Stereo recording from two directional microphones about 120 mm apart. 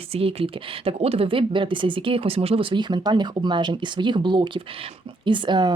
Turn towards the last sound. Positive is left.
turn(degrees=-40)  # may be behind; listen again after turning